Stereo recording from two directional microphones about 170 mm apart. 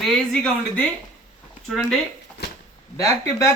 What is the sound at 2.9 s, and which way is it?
Speech, 20° left (ahead or behind).